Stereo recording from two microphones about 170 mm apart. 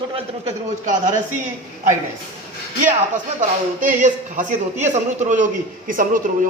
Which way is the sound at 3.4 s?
50° right (ahead or behind).